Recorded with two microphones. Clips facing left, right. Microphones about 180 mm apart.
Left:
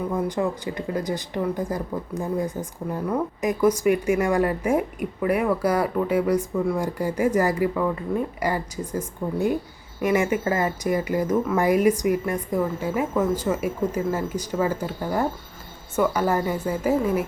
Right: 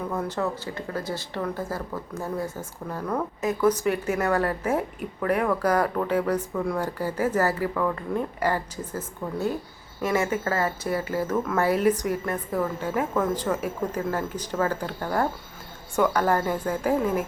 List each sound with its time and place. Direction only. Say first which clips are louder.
0.1 s speech: left 2 dB; 10° left (ahead or behind)